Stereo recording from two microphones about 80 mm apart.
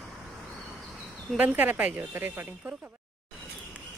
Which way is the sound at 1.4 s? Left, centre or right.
Right.